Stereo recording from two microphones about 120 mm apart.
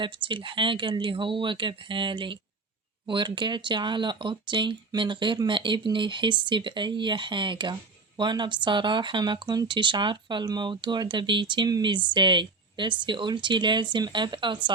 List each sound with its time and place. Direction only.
0.0 s speech: 45° right (ahead or behind)